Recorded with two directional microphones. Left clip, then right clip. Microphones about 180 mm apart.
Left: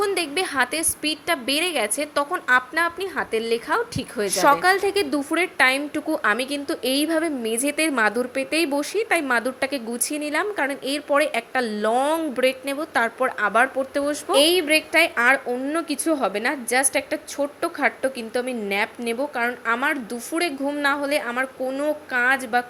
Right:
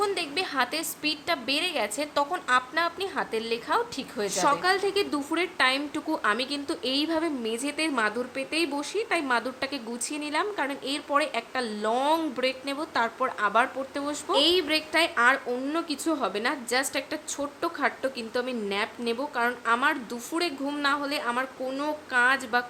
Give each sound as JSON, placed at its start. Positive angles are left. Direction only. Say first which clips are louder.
{"t": 0.0, "sound": "a woman's voice", "louder": "left 5 dB", "side_deg": 20}